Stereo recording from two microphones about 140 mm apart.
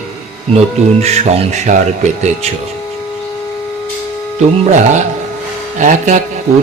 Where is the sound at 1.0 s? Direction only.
50° right (ahead or behind).